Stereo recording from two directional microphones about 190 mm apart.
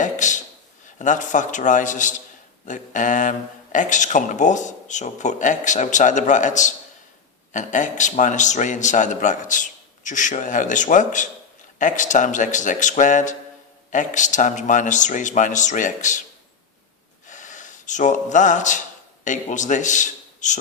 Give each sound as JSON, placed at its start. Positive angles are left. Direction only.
{"t": 0.0, "sound": "a sound", "side_deg": 40}
{"t": 0.9, "sound": "speech", "side_deg": 40}
{"t": 17.2, "sound": "gasp", "side_deg": 40}
{"t": 19.2, "sound": "a man's voice", "side_deg": 40}